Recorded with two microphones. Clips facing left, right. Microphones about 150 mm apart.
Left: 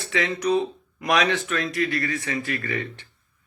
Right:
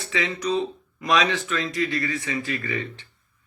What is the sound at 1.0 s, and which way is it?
Speech, 60° left (ahead or behind).